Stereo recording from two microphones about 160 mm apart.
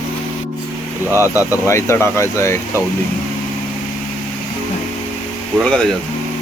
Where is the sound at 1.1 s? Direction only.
15° right (ahead or behind).